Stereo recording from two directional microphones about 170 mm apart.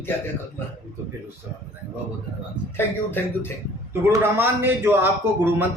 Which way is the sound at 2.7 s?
10° left (ahead or behind).